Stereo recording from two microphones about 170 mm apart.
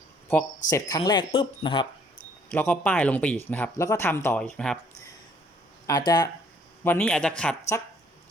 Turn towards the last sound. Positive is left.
turn(degrees=5)  # may be behind; listen again after turning